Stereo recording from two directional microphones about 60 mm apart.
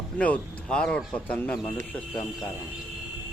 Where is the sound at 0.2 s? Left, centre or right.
Centre.